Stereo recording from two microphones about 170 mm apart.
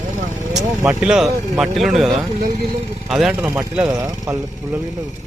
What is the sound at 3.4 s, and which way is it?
Speech, 20° right (ahead or behind).